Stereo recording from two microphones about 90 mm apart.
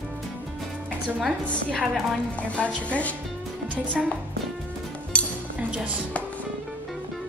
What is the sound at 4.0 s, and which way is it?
Speech, 5° right (ahead or behind).